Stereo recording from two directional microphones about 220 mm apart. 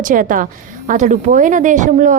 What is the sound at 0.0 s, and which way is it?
A woman's voice, 35° right (ahead or behind).